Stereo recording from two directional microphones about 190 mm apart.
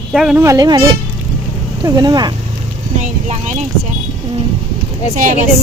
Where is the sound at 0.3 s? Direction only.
15° right (ahead or behind).